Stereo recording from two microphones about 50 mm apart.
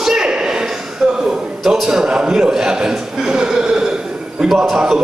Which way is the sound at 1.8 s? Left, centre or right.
Centre.